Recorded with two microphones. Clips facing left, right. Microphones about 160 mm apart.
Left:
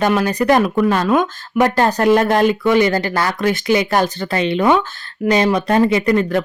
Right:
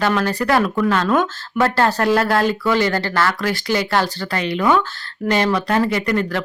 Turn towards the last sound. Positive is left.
turn(degrees=20)  # may be behind; listen again after turning